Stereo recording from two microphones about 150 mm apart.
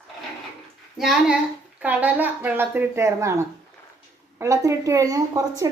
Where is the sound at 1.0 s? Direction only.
Centre (ahead or behind).